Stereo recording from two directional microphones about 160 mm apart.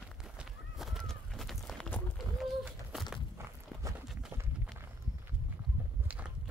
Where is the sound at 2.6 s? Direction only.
5° right (ahead or behind).